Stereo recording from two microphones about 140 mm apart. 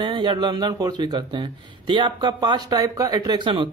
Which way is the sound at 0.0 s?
35° right (ahead or behind).